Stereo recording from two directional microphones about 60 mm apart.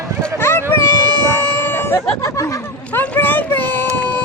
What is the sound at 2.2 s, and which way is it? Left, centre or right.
Speech, left.